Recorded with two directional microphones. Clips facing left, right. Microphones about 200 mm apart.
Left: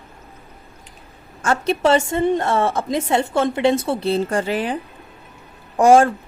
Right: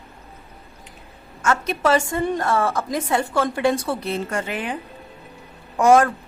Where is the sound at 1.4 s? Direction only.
30° left (ahead or behind).